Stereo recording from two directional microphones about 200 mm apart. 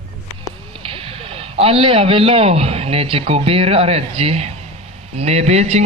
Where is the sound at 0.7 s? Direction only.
30° right (ahead or behind).